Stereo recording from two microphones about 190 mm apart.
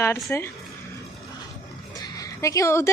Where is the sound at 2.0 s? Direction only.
20° left (ahead or behind).